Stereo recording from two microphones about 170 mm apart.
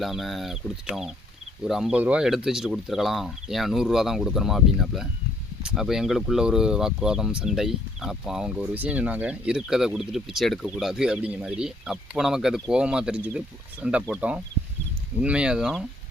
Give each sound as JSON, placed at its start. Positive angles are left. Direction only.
{"t": 0.0, "sound": "speech", "side_deg": 0}